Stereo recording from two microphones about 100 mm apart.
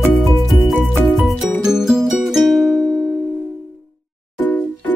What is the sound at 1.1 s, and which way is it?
Music, centre (ahead or behind).